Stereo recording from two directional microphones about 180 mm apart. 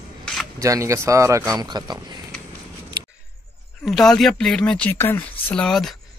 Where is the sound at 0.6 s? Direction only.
15° right (ahead or behind).